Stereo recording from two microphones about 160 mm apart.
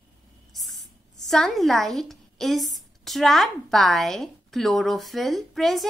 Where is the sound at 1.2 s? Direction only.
Centre (ahead or behind).